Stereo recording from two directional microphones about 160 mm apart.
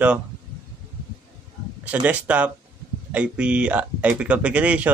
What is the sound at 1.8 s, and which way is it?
Speech, 10° right (ahead or behind).